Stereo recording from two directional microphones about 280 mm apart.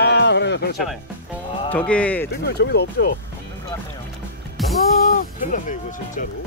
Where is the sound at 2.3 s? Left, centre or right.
Left.